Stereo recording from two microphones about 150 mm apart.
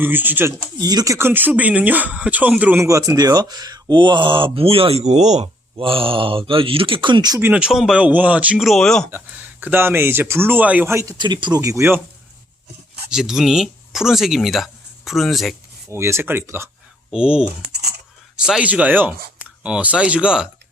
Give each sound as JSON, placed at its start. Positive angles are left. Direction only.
{"t": 0.0, "sound": "speech", "side_deg": -15}
{"t": 0.8, "sound": "speech", "side_deg": -25}
{"t": 5.7, "sound": "speech", "side_deg": -35}
{"t": 7.4, "sound": "speech", "side_deg": -5}
{"t": 9.0, "sound": "speech", "side_deg": -15}
{"t": 11.2, "sound": "speech", "side_deg": -30}
{"t": 13.1, "sound": "speech", "side_deg": -5}
{"t": 15.9, "sound": "speech", "side_deg": -15}
{"t": 17.7, "sound": "a sound", "side_deg": -90}
{"t": 18.3, "sound": "speech", "side_deg": -5}